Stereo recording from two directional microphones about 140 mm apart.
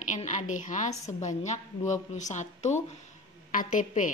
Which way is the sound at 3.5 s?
70° left (ahead or behind).